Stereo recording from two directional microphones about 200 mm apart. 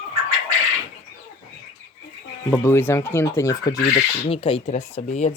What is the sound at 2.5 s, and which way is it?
Speech, 10° left (ahead or behind).